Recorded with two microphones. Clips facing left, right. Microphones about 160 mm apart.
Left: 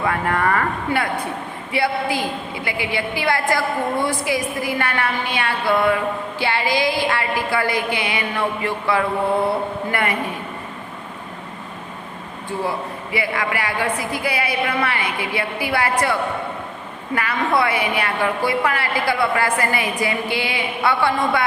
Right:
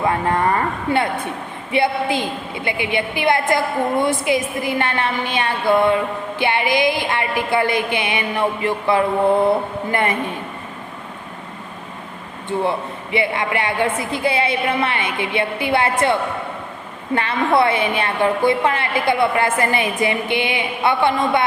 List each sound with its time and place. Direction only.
0.0 s a woman's voice: 25° right (ahead or behind)
12.6 s a woman's voice: 25° right (ahead or behind)
17.2 s a woman's voice: 25° right (ahead or behind)